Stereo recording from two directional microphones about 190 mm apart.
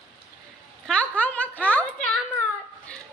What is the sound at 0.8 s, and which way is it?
A woman's voice, 5° left (ahead or behind).